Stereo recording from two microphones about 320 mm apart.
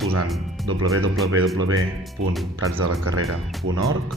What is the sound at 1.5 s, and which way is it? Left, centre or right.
Speech, right.